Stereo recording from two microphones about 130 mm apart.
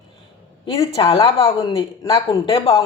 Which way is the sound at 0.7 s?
40° left (ahead or behind).